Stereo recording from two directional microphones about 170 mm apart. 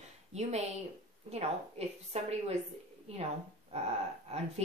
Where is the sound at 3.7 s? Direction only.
40° right (ahead or behind).